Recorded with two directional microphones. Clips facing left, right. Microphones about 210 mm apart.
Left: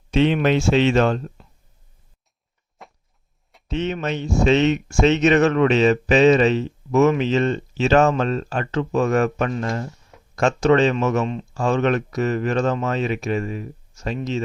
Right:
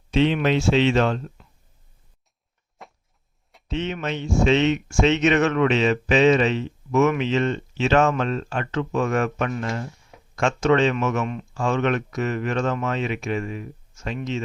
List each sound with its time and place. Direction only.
0.1 s speech: 50° left (ahead or behind)
2.8 s a sound: centre (ahead or behind)
3.7 s speech: 40° left (ahead or behind)